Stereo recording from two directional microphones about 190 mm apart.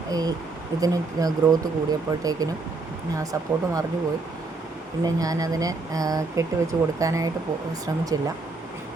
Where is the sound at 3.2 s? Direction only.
15° right (ahead or behind).